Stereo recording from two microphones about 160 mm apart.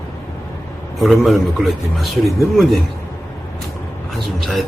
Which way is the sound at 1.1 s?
Centre (ahead or behind).